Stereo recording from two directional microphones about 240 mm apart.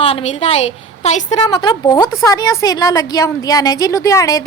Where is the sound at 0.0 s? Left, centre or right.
Left.